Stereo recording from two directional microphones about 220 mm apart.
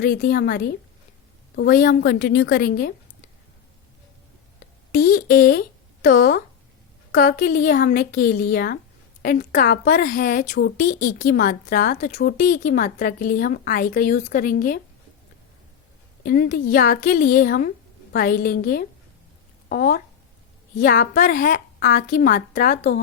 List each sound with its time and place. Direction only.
0.0 s a woman's voice: 45° left (ahead or behind)
4.9 s a woman's voice: 40° left (ahead or behind)
16.2 s a woman's voice: 45° left (ahead or behind)